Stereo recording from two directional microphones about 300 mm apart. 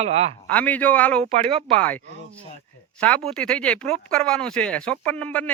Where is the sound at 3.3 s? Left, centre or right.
Centre.